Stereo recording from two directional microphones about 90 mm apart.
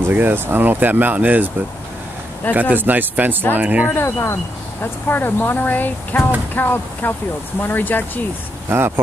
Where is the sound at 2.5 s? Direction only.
20° right (ahead or behind).